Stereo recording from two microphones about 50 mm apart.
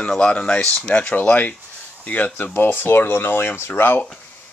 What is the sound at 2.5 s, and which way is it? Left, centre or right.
Speech, left.